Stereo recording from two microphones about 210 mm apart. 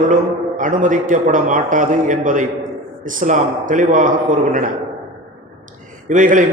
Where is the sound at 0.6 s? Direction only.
40° right (ahead or behind).